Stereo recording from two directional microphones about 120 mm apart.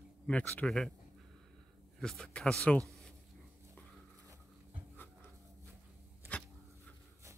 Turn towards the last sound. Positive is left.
turn(degrees=10)  # may be behind; listen again after turning